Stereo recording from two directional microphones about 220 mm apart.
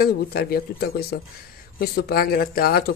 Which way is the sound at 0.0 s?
45° left (ahead or behind).